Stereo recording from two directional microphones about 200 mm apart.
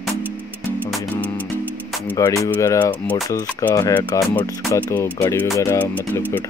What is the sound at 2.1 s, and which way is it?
Speech, 15° left (ahead or behind).